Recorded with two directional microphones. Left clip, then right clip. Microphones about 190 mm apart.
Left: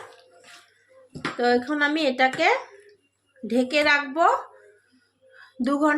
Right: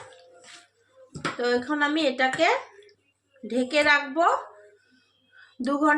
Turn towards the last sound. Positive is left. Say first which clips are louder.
# left 1 dB
turn(degrees=45)  # may be behind; listen again after turning